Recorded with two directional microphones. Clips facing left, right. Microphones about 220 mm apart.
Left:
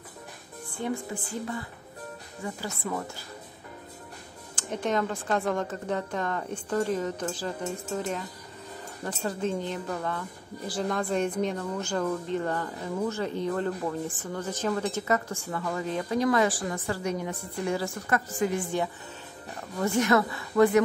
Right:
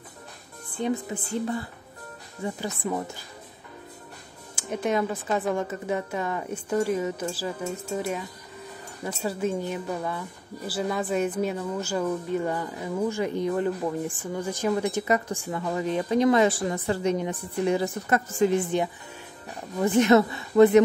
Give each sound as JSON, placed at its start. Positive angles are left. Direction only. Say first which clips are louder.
{"t": 0.7, "sound": "a woman's voice", "louder": "right 4 dB", "side_deg": -20}
{"t": 2.4, "sound": "a woman's voice", "louder": "right 4 dB", "side_deg": -20}
{"t": 4.6, "sound": "a woman's voice", "louder": "right 2 dB", "side_deg": -10}